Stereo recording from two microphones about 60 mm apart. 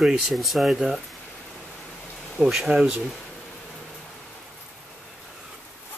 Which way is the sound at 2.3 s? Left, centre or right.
Centre.